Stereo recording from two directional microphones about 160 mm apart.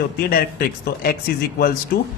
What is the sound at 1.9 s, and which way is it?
Speech, 90° left.